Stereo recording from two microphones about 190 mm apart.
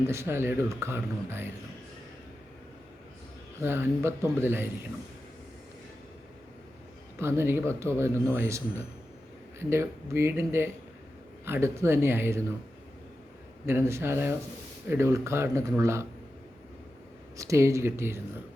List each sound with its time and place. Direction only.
0.1 s a man's voice: 15° right (ahead or behind)
3.6 s a man's voice: 10° right (ahead or behind)
7.2 s a man's voice: 15° right (ahead or behind)
13.7 s a man's voice: 15° right (ahead or behind)
17.3 s a man's voice: 15° right (ahead or behind)